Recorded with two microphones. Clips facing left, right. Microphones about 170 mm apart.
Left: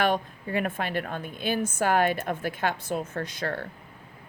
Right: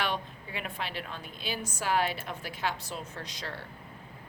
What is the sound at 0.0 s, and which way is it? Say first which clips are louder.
Speech: left 8 dB; 50° left (ahead or behind).